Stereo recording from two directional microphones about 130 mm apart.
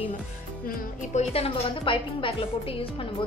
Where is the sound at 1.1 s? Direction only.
50° left (ahead or behind).